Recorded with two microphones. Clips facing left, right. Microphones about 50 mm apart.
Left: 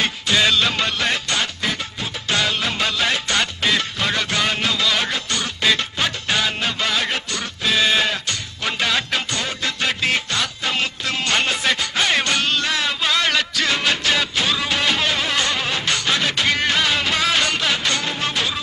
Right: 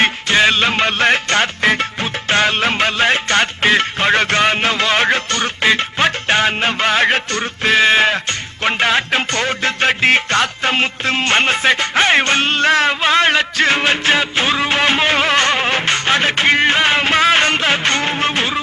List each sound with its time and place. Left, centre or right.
0.0 s music: right